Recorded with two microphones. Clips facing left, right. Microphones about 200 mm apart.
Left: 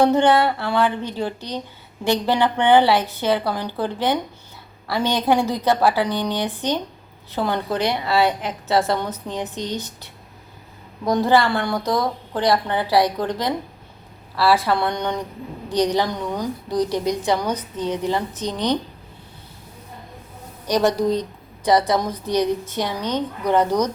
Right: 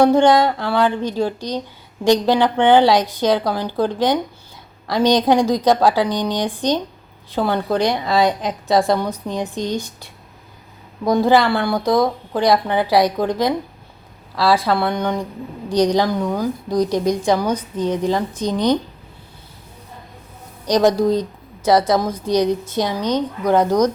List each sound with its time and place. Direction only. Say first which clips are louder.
0.0 s a woman's voice: right 3 dB; 10° right (ahead or behind)
20.8 s a woman's voice: right 4 dB; 10° right (ahead or behind)